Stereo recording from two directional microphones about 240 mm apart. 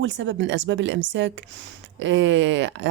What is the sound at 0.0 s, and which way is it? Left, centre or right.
Speech, right.